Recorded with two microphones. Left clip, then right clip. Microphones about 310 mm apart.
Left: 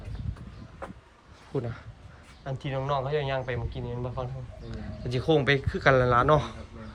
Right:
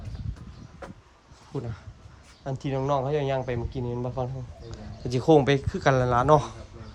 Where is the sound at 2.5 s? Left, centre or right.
Centre.